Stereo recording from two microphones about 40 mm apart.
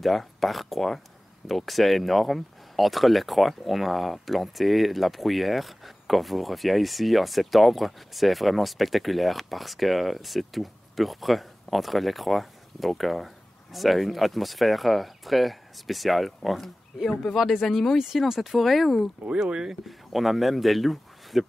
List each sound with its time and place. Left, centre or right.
0.0 s speech: centre
17.9 s speech: centre
19.4 s speech: centre
20.1 s speech: centre